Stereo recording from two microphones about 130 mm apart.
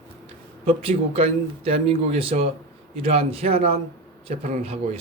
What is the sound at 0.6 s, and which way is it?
Speech, 45° right (ahead or behind).